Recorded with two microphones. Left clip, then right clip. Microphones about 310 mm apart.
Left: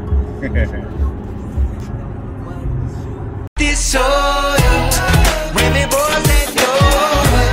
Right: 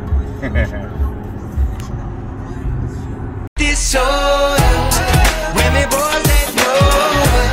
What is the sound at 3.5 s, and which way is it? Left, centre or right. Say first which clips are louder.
Music: even; centre.